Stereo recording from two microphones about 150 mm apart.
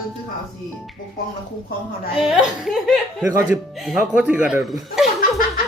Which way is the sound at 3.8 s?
Centre (ahead or behind).